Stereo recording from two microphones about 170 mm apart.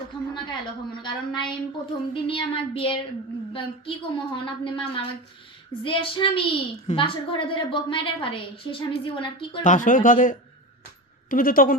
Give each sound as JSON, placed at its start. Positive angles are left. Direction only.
{"t": 1.0, "sound": "a woman's voice", "side_deg": 25}
{"t": 9.6, "sound": "speech", "side_deg": 50}